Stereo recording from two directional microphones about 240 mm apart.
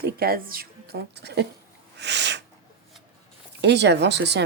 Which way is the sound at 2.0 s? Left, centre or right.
Right.